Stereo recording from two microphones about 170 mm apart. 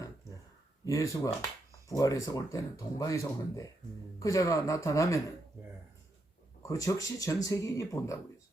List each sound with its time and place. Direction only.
0.9 s speech: 20° left (ahead or behind)
6.6 s speech: 20° left (ahead or behind)